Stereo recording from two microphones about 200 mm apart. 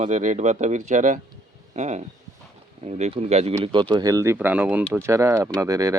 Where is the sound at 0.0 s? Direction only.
35° right (ahead or behind).